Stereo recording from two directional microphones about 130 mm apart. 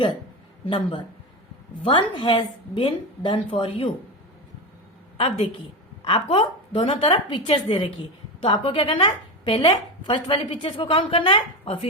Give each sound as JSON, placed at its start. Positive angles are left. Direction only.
{"t": 0.6, "sound": "a woman's voice", "side_deg": 40}
{"t": 5.1, "sound": "a woman's voice", "side_deg": 45}